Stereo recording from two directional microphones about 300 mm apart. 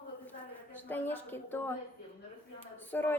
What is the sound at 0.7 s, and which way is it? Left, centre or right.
A woman's voice, centre.